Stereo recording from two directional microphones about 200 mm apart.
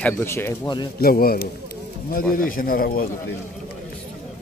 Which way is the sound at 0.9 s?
50° left (ahead or behind).